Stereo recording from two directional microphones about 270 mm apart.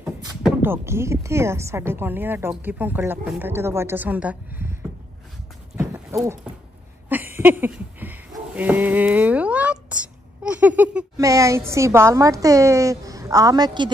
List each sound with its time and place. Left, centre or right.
0.5 s speech: centre
5.8 s horse: centre
7.1 s a sound: centre
10.8 s speech: centre